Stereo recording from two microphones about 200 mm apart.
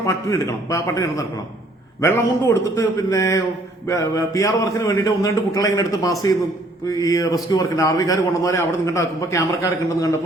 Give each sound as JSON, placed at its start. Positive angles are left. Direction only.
{"t": 0.0, "sound": "a man's voice", "side_deg": 15}